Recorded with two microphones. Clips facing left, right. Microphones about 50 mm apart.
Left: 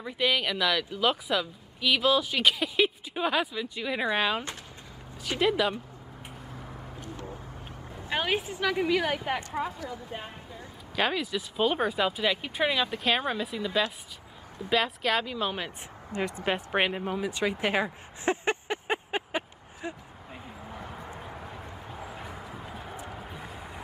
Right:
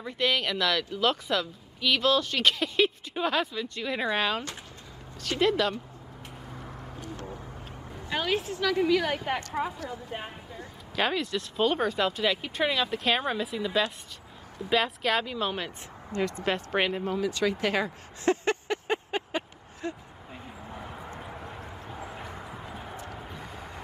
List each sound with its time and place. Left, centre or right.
0.0 s speech: centre
6.5 s a sound: centre
8.1 s speech: centre
9.8 s speech: centre
11.0 s speech: centre
16.1 s speech: centre
20.4 s vehicle: centre
21.2 s clip-clop: centre
23.1 s vehicle: centre